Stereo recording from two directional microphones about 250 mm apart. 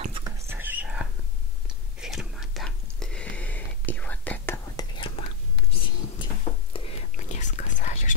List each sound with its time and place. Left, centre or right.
0.0 s whispering: right
0.5 s whispering: centre
5.7 s a sound: left
7.2 s whispering: left